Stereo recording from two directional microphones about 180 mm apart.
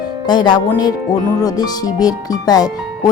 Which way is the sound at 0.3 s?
25° left (ahead or behind).